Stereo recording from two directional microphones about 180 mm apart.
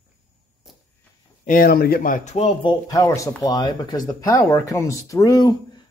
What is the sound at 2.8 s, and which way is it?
Speech, 20° left (ahead or behind).